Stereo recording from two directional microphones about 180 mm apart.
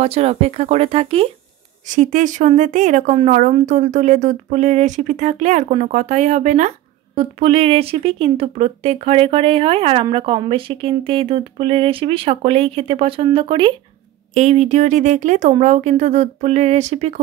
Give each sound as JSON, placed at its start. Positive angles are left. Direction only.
{"t": 0.0, "sound": "speech", "side_deg": -35}
{"t": 1.9, "sound": "speech", "side_deg": -45}
{"t": 14.3, "sound": "speech", "side_deg": -40}